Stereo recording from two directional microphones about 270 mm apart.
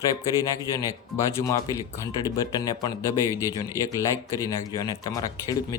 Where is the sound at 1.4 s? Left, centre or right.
Centre.